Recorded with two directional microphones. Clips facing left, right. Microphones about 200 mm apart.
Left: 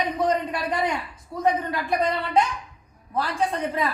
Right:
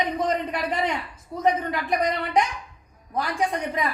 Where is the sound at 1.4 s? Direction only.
20° right (ahead or behind).